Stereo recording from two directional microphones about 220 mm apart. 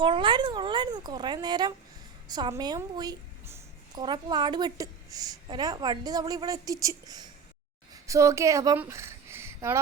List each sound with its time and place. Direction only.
0.0 s a woman's voice: 20° right (ahead or behind)